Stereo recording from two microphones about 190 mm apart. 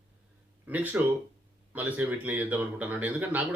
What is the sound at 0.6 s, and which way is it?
Speech, 10° right (ahead or behind).